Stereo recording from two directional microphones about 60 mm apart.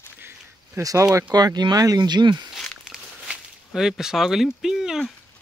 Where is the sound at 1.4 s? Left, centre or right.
Right.